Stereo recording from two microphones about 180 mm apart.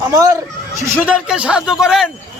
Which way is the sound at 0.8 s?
10° right (ahead or behind).